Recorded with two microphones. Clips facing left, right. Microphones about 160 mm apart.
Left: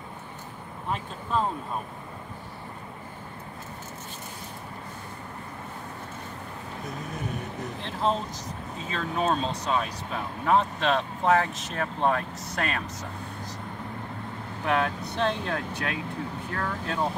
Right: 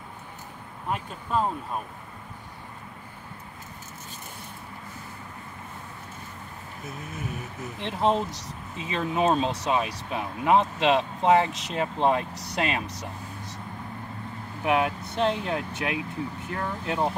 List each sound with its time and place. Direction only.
0.8 s speech: 10° right (ahead or behind)
7.8 s speech: 20° right (ahead or behind)
14.6 s speech: 15° right (ahead or behind)